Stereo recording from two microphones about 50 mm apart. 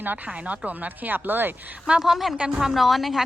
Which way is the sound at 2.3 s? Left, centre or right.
Right.